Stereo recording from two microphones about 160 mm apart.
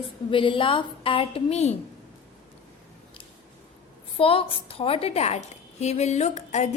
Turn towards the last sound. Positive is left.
turn(degrees=45)  # may be behind; listen again after turning